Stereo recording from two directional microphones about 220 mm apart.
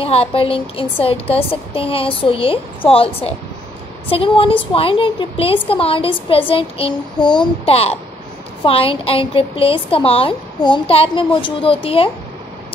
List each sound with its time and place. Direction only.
0.0 s a woman's voice: 25° left (ahead or behind)